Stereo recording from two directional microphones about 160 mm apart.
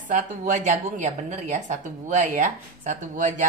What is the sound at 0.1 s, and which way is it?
A woman's voice, 50° right (ahead or behind).